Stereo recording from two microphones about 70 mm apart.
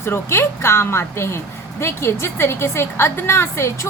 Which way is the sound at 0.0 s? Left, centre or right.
Left.